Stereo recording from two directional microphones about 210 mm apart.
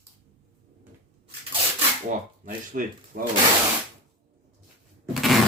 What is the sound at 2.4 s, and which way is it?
Speech, 40° right (ahead or behind).